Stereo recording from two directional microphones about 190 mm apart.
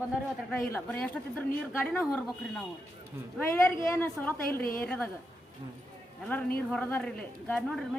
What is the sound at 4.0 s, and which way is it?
Speech, 10° left (ahead or behind).